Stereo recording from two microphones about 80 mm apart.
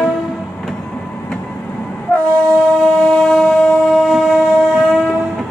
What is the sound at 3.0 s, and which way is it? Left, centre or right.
Train, centre.